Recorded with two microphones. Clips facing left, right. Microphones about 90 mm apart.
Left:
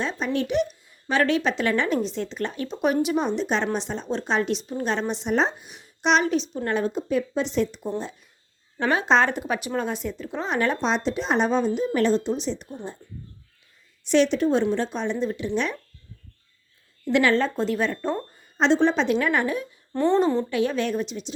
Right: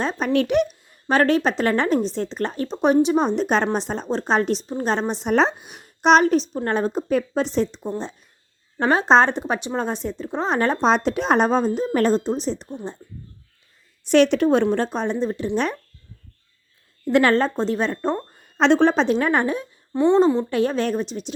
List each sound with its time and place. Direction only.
0.0 s speech: 40° right (ahead or behind)
0.3 s speech: 60° right (ahead or behind); by 3.4 s 35° right (ahead or behind)
3.4 s a woman's voice: 45° right (ahead or behind)
5.3 s a woman's voice: 70° right (ahead or behind); by 12.6 s 40° right (ahead or behind)
14.1 s a woman's voice: 60° right (ahead or behind); by 15.8 s 40° right (ahead or behind)
17.1 s speech: 40° right (ahead or behind)
18.3 s a sound: 65° right (ahead or behind)
18.9 s speech: 35° right (ahead or behind)
19.9 s a woman's voice: 15° right (ahead or behind)
20.5 s speech: 40° right (ahead or behind)